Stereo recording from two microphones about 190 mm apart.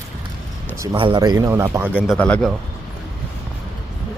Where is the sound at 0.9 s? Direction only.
25° right (ahead or behind).